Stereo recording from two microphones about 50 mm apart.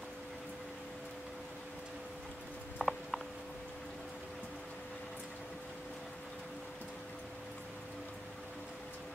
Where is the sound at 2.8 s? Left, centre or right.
Centre.